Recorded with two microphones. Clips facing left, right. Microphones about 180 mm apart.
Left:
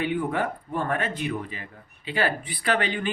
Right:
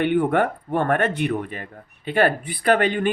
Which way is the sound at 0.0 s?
65° right (ahead or behind).